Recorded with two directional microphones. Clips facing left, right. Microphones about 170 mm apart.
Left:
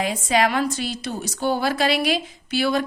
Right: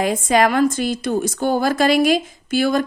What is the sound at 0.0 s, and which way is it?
Speech, 50° right (ahead or behind).